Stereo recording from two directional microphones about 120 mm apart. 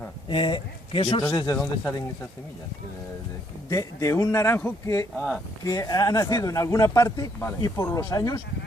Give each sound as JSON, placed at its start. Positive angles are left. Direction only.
{"t": 0.3, "sound": "speech", "side_deg": 45}
{"t": 1.3, "sound": "speech", "side_deg": 30}
{"t": 3.7, "sound": "speech", "side_deg": 25}